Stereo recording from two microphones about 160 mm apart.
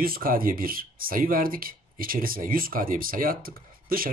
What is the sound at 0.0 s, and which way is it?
Speech, 65° right (ahead or behind).